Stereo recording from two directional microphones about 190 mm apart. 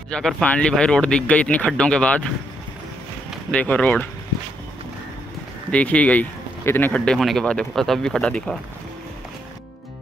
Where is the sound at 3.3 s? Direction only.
5° left (ahead or behind).